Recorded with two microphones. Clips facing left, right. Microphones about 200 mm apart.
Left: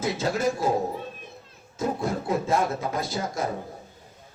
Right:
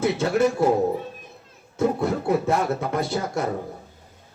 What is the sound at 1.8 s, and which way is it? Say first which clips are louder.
Speech: right 5 dB; 65° right (ahead or behind).